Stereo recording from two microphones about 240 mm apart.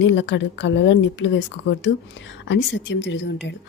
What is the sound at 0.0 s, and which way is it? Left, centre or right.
Speech, left.